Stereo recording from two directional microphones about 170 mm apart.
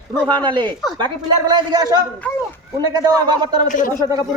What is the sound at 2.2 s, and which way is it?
Speech, 10° left (ahead or behind).